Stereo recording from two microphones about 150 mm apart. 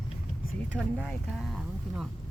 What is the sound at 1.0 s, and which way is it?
Speech, centre (ahead or behind).